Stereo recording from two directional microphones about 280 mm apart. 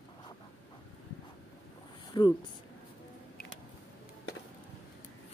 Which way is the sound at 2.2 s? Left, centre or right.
Centre.